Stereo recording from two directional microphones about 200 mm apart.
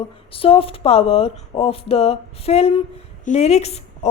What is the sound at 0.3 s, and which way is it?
Speech, 30° left (ahead or behind).